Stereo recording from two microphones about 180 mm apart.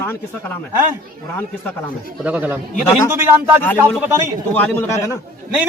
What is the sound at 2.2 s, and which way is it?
Speech, 10° right (ahead or behind).